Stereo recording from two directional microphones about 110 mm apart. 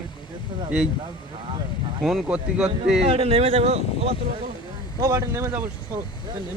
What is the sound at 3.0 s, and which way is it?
Speech, 65° right (ahead or behind).